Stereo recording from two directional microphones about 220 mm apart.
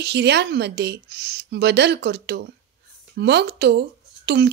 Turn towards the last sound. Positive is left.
turn(degrees=-50)  # may be behind; listen again after turning